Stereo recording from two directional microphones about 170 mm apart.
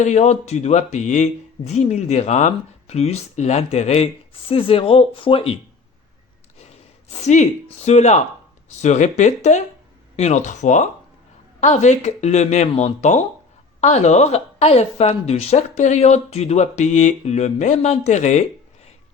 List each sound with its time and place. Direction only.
0.0 s speech: 40° left (ahead or behind)
7.2 s speech: 40° left (ahead or behind)